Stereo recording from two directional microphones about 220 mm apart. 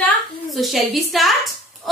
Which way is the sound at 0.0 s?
Centre (ahead or behind).